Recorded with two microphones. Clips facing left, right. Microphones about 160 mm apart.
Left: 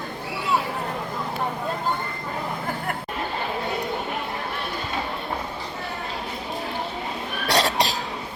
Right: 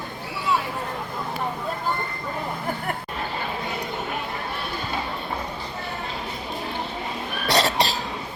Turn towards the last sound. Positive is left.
turn(degrees=10)  # may be behind; listen again after turning